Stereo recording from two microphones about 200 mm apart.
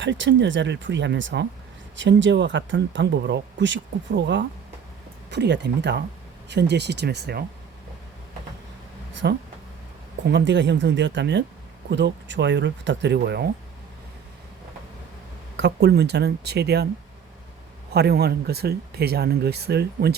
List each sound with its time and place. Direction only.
0.0 s speech: 65° right (ahead or behind)
9.2 s speech: 55° right (ahead or behind)
13.1 s speech: 55° right (ahead or behind)
15.5 s speech: 60° right (ahead or behind)
17.9 s speech: 55° right (ahead or behind)